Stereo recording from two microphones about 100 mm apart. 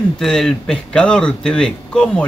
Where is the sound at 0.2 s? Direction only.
5° left (ahead or behind).